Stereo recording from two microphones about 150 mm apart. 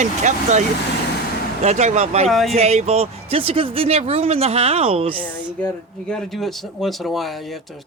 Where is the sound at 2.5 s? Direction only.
45° right (ahead or behind).